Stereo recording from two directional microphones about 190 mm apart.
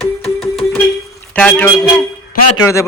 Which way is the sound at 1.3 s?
5° left (ahead or behind).